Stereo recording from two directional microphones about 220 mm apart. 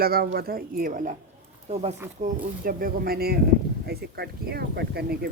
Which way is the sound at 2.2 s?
40° right (ahead or behind).